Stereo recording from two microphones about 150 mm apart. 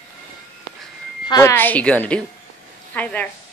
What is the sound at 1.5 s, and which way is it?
A woman's voice, 10° left (ahead or behind).